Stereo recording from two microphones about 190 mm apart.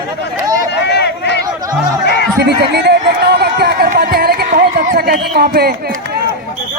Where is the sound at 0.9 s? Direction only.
60° left (ahead or behind).